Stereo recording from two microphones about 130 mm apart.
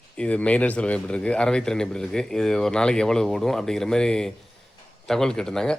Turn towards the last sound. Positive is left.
turn(degrees=5)  # may be behind; listen again after turning